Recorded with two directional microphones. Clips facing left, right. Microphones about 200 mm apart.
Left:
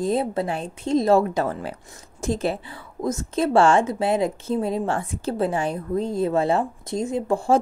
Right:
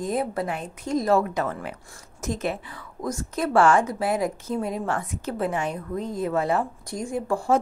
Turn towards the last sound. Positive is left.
turn(degrees=25)  # may be behind; listen again after turning